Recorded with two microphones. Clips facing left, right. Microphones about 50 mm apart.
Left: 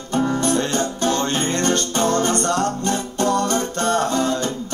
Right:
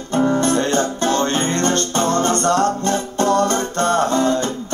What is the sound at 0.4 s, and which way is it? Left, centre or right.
Music, right.